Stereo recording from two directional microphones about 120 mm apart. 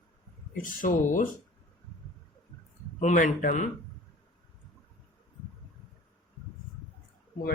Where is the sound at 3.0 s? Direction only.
90° left.